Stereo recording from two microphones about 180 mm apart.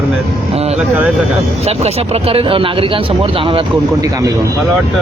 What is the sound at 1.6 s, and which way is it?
Speech, 35° right (ahead or behind).